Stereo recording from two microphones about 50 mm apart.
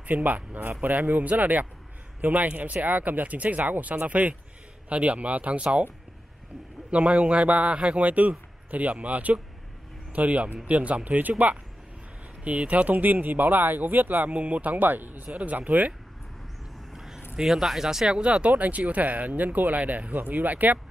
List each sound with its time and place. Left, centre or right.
0.0 s a man's voice: right
6.9 s a man's voice: right
15.3 s speech: right
16.9 s a sound: centre
17.4 s speech: centre
18.5 s speech: right